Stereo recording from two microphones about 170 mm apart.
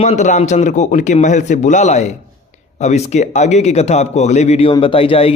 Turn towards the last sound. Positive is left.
turn(degrees=35)  # may be behind; listen again after turning